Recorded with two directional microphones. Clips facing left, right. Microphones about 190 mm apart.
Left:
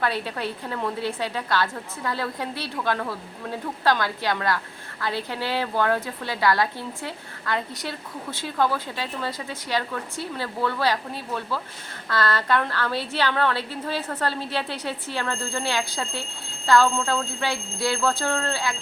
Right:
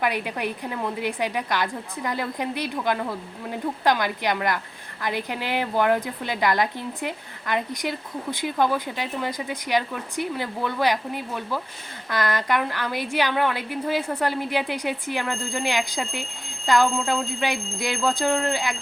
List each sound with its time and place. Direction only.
0.0 s a woman's voice: 15° right (ahead or behind)